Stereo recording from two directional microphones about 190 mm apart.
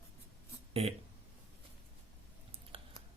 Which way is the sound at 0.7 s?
30° right (ahead or behind).